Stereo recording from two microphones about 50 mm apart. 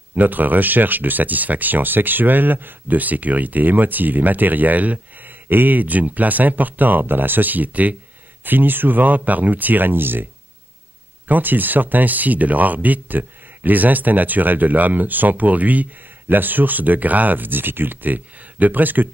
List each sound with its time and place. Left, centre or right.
0.1 s speech: right
11.2 s speech: right